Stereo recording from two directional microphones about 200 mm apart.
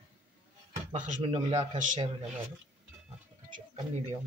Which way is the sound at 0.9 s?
35° right (ahead or behind).